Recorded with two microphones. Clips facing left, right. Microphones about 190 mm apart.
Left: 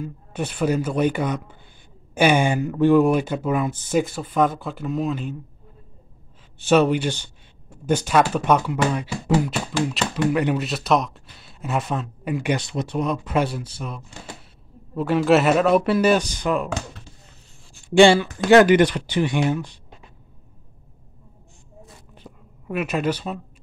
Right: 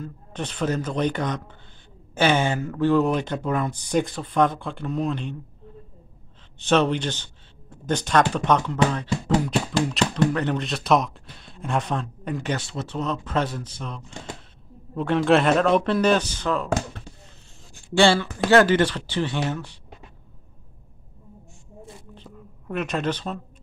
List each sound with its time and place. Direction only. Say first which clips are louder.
0.0 s speech: left 4 dB; 10° left (ahead or behind)
6.6 s speech: left 3 dB; 10° left (ahead or behind)
17.8 s speech: left 5 dB; 15° left (ahead or behind)
22.1 s a sound: right 2 dB; 10° left (ahead or behind)